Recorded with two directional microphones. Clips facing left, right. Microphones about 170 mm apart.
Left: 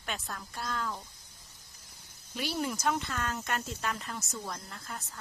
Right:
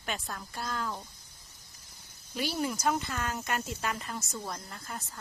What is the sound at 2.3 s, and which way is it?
Speech, centre (ahead or behind).